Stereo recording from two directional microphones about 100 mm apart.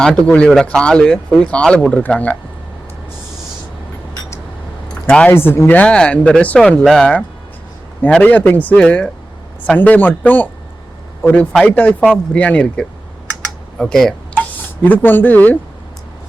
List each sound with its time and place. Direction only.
0.0 s speech: 10° left (ahead or behind)
5.0 s speech: 10° left (ahead or behind)
5.3 s speech: 25° left (ahead or behind)
11.6 s speech: 15° left (ahead or behind)
14.8 s speech: 20° left (ahead or behind)